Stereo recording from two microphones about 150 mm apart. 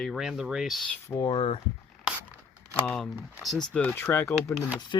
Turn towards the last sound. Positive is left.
turn(degrees=20)  # may be behind; listen again after turning